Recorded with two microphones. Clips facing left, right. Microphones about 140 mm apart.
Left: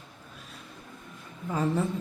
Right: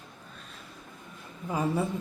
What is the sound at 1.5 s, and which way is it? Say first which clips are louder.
Speech: left 1 dB; 10° right (ahead or behind).